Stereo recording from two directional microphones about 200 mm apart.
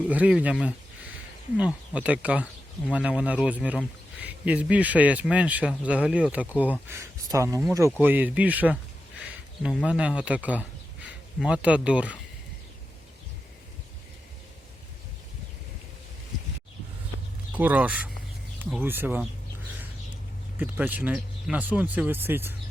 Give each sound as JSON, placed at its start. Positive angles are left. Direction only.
{"t": 0.1, "sound": "speech", "side_deg": -5}
{"t": 1.5, "sound": "a man's voice", "side_deg": -5}
{"t": 17.5, "sound": "speech", "side_deg": -10}
{"t": 20.6, "sound": "speech", "side_deg": -10}